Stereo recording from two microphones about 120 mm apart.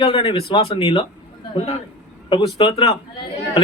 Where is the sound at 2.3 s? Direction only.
45° left (ahead or behind).